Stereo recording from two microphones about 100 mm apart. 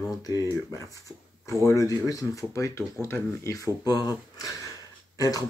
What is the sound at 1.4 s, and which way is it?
Speech, 30° left (ahead or behind).